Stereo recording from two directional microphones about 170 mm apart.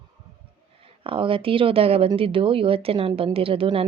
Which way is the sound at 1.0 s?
30° right (ahead or behind).